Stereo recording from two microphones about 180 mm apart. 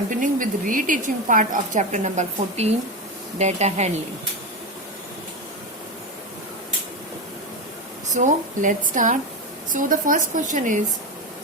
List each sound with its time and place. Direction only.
0.1 s a woman's voice: 45° right (ahead or behind)
8.1 s a woman's voice: 45° right (ahead or behind)